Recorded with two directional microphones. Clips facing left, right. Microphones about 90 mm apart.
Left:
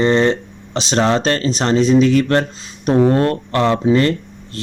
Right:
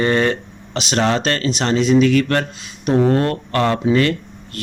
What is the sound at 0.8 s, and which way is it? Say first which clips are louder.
Speech: left 2 dB; 35° left (ahead or behind).